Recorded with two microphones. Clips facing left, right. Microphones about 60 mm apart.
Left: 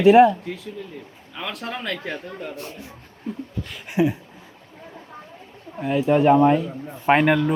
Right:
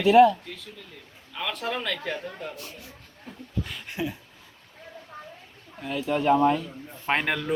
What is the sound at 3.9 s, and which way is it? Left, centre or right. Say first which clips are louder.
Speech: left 13 dB; left.